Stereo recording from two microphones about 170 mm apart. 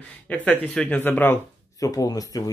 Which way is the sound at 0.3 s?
10° left (ahead or behind).